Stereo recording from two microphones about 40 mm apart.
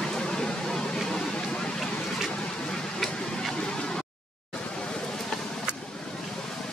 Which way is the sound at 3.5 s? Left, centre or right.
Left.